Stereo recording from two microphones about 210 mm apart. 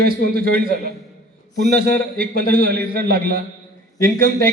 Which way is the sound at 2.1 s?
45° right (ahead or behind).